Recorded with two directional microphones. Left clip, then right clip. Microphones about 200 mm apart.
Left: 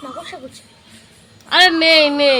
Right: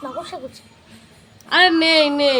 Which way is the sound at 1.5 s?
10° left (ahead or behind).